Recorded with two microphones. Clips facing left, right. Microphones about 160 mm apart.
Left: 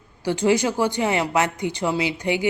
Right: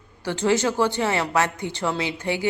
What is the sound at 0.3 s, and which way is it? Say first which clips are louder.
Speech: left 2 dB; 15° left (ahead or behind).